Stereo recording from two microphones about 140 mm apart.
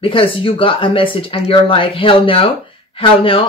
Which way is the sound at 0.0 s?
40° left (ahead or behind).